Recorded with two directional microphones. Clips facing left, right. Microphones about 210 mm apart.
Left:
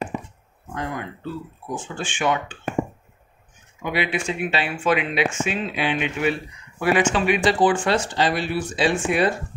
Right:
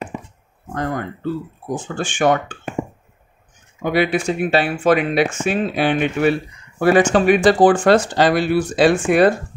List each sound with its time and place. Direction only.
0.7 s speech: 45° right (ahead or behind)
3.8 s speech: 40° right (ahead or behind)